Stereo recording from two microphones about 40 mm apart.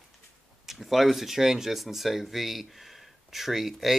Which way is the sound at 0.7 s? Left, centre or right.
Centre.